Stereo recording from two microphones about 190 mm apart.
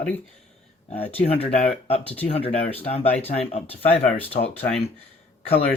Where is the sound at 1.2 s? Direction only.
30° left (ahead or behind).